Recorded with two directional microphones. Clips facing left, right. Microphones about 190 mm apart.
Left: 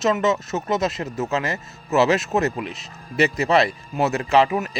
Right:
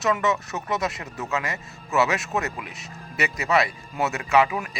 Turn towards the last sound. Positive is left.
turn(degrees=25)  # may be behind; listen again after turning